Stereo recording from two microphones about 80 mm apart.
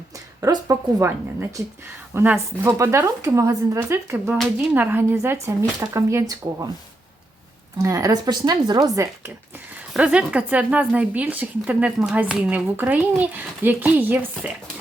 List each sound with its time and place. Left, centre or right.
0.4 s speech: right
1.0 s speech: right
4.5 s speech: right
7.8 s speech: right
10.0 s a woman's voice: centre